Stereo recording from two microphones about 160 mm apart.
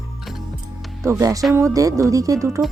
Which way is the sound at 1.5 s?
20° right (ahead or behind).